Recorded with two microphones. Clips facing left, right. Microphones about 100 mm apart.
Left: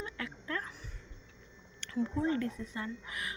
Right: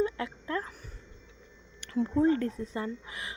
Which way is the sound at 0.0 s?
25° right (ahead or behind).